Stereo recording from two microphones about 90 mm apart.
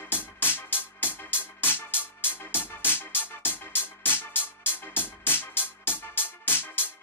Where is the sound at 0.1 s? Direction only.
25° left (ahead or behind).